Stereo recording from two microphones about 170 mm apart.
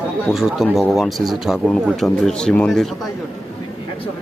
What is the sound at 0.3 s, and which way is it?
Speech, centre (ahead or behind).